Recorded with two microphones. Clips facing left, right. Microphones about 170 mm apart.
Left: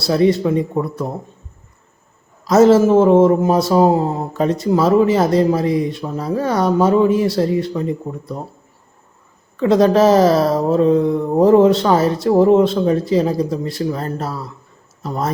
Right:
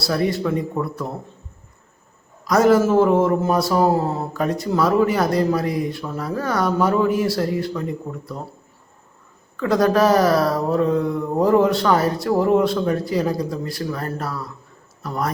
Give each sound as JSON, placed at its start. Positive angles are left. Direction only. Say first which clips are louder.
{"t": 0.0, "sound": "speech", "louder": "left 6 dB", "side_deg": 20}
{"t": 2.4, "sound": "speech", "louder": "left 5 dB", "side_deg": 25}
{"t": 9.6, "sound": "speech", "louder": "left 5 dB", "side_deg": 20}